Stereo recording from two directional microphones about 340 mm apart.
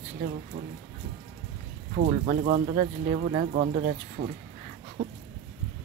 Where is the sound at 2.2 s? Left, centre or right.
Centre.